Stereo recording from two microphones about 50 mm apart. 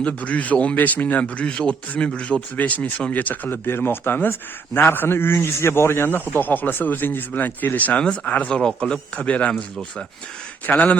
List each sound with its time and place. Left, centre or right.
0.0 s speech: left
1.2 s speech: centre
3.5 s a man's voice: left
7.9 s speech: left
10.7 s speech: left